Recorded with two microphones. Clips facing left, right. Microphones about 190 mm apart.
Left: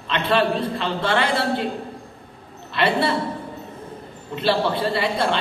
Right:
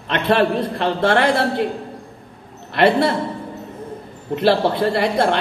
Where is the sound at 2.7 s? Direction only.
55° right (ahead or behind).